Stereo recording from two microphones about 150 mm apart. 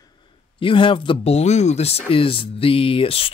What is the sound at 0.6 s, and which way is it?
Speech, 35° left (ahead or behind).